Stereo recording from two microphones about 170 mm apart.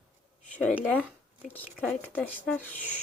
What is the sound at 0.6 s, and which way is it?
Speech, 10° left (ahead or behind).